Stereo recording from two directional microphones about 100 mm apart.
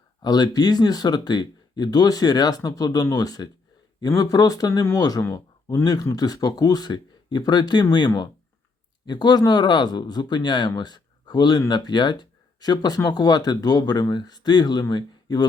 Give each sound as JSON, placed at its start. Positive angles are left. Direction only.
{"t": 0.2, "sound": "speech", "side_deg": 45}